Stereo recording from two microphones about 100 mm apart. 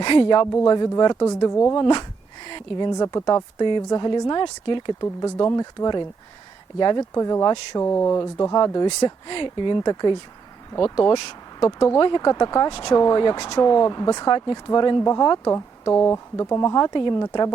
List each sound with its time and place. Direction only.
0.0 s speech: 50° left (ahead or behind)
0.5 s speech: 35° left (ahead or behind)
1.8 s a sound: 45° left (ahead or behind)
2.9 s speech: 35° left (ahead or behind)
3.6 s speech: 50° left (ahead or behind)
4.9 s speech: 35° left (ahead or behind)
7.8 s speech: 25° left (ahead or behind); by 9.1 s 40° left (ahead or behind)
9.2 s speech: 55° left (ahead or behind)
11.6 s speech: 30° left (ahead or behind)
11.9 s speech: 50° left (ahead or behind)
15.0 s speech: 30° left (ahead or behind)